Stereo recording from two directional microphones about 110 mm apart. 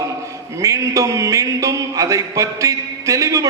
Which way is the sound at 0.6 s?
30° right (ahead or behind).